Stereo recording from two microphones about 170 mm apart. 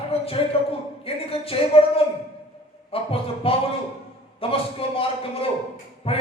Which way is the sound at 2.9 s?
35° left (ahead or behind).